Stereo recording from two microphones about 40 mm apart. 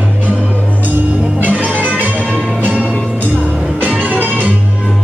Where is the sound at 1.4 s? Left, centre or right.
Right.